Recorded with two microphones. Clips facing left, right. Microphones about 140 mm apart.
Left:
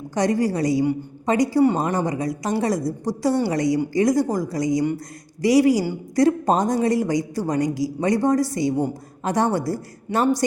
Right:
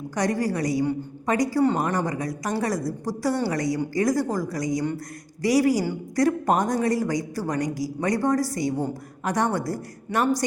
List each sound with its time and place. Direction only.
0.1 s speech: 25° left (ahead or behind)